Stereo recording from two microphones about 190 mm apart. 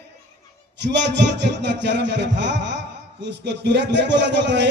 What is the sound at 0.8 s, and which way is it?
Speech, 65° right (ahead or behind).